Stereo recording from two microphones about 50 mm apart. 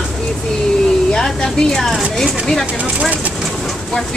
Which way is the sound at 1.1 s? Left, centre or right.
Centre.